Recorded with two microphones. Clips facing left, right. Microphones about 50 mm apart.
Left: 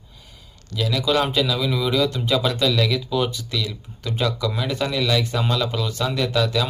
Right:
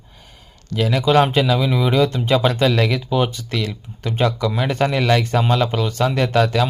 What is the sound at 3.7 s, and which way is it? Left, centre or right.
Speech, right.